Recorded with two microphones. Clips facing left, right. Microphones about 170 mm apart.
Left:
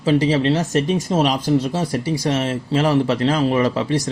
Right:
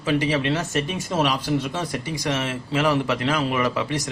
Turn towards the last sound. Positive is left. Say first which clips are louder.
# left 5 dB
turn(degrees=30)  # may be behind; listen again after turning